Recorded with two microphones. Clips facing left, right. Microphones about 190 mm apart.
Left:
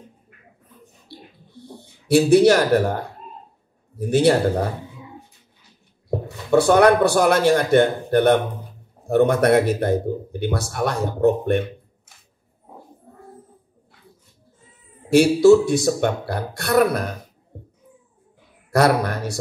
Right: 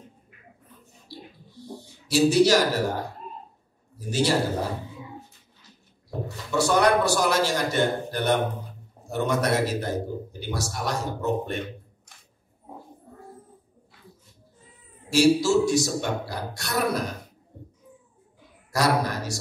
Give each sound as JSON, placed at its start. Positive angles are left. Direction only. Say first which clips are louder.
{"t": 1.0, "sound": "a sound", "louder": "right 2 dB", "side_deg": 60}
{"t": 3.9, "sound": "speech", "louder": "left 7 dB", "side_deg": 60}
{"t": 6.0, "sound": "speech", "louder": "left 7 dB", "side_deg": 55}
{"t": 15.0, "sound": "speech", "louder": "left 8 dB", "side_deg": 55}
{"t": 18.7, "sound": "speech", "louder": "left 6 dB", "side_deg": 60}